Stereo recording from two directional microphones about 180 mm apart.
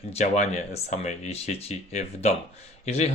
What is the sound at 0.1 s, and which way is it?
Speech, 35° left (ahead or behind).